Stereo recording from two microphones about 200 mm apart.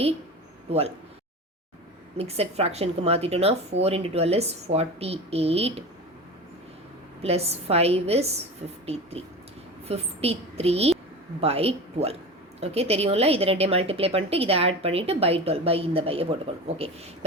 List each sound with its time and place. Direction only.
0.7 s speech: 30° right (ahead or behind)
2.1 s speech: 30° right (ahead or behind)
7.2 s a woman's voice: 30° right (ahead or behind)